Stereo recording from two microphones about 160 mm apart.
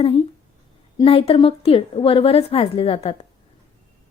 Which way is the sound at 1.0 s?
35° left (ahead or behind).